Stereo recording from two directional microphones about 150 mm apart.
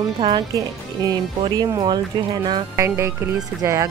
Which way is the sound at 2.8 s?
15° right (ahead or behind).